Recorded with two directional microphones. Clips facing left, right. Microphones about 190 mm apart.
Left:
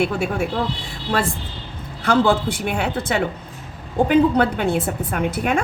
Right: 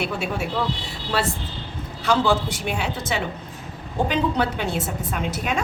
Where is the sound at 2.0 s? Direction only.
55° left (ahead or behind).